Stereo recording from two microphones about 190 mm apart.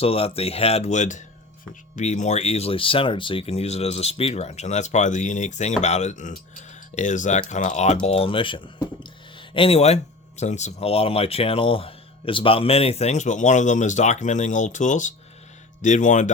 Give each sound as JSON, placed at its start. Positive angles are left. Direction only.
{"t": 0.0, "sound": "speech", "side_deg": 30}